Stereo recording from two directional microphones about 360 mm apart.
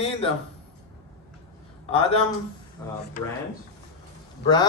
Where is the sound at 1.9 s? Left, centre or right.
Centre.